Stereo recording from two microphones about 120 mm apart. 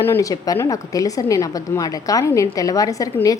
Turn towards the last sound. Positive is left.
turn(degrees=30)  # may be behind; listen again after turning